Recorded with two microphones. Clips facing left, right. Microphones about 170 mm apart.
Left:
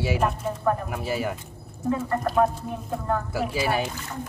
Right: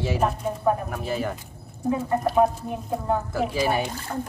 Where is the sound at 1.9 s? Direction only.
15° right (ahead or behind).